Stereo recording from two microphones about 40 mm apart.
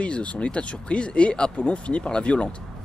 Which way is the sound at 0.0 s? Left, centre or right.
Left.